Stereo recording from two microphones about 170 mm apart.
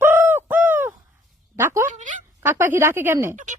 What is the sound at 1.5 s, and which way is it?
Speech, 15° right (ahead or behind).